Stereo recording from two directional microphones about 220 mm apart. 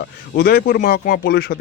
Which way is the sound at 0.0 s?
45° left (ahead or behind).